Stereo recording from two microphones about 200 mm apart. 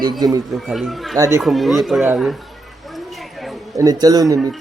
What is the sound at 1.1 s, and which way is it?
Speech, 15° right (ahead or behind).